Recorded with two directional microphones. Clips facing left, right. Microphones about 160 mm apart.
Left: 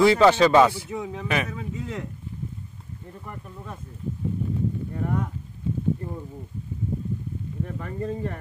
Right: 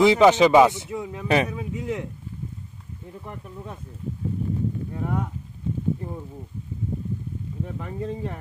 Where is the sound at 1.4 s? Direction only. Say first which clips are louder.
Right 4 dB; 10° right (ahead or behind).